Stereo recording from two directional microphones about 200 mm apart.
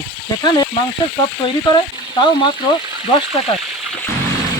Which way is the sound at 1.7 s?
25° left (ahead or behind).